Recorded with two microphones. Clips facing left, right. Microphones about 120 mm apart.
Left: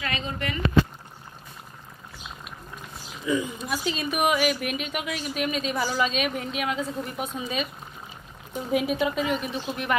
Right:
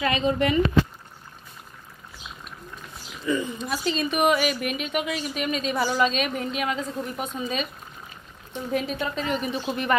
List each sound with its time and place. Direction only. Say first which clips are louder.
0.0 s speech: right 8 dB; 20° right (ahead or behind)
3.3 s speech: right 1 dB; 10° left (ahead or behind)